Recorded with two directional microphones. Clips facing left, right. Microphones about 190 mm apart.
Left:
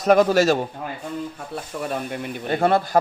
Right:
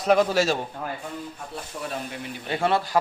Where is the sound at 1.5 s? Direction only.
55° left (ahead or behind).